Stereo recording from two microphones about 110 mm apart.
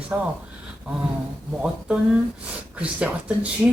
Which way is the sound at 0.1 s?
15° right (ahead or behind).